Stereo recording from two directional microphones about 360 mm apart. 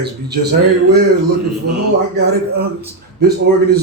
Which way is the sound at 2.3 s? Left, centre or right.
Right.